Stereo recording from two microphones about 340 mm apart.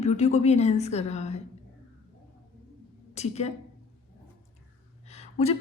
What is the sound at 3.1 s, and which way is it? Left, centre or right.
Speech, centre.